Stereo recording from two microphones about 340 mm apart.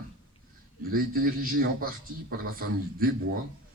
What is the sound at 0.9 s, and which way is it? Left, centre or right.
A man's voice, right.